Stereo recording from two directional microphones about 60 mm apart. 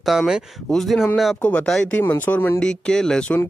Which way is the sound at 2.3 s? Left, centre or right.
Left.